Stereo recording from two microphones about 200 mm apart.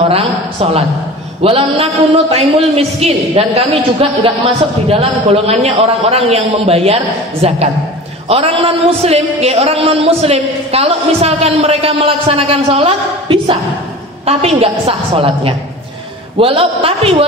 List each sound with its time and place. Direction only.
0.1 s a woman's voice: 30° right (ahead or behind)